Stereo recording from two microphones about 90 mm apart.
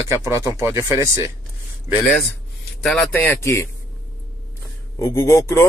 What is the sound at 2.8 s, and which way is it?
Speech, 10° left (ahead or behind).